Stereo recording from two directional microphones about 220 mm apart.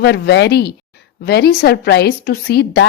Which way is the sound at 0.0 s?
50° left (ahead or behind).